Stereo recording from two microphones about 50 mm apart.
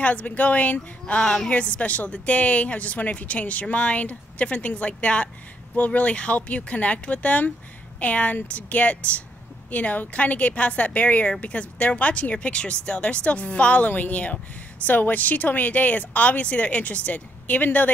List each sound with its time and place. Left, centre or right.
0.0 s speech: left